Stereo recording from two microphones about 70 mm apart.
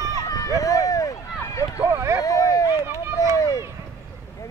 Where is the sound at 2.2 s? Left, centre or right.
Left.